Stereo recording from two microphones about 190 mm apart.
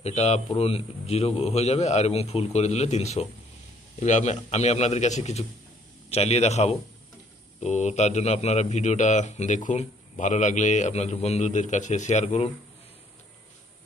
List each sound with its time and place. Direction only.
0.0 s speech: 35° left (ahead or behind)